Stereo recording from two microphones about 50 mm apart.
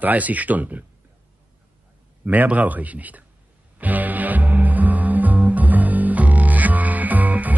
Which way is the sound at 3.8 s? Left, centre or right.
Right.